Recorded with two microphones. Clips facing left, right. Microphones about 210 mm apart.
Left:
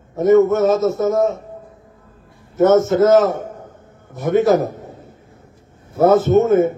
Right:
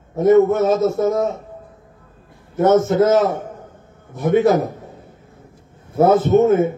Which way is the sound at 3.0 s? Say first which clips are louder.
Left 2 dB; 50° left (ahead or behind).